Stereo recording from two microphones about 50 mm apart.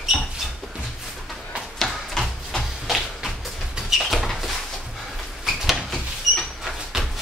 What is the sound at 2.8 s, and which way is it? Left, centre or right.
Tap, centre.